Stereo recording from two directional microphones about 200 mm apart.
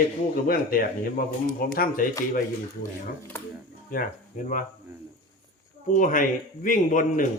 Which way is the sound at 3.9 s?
45° left (ahead or behind).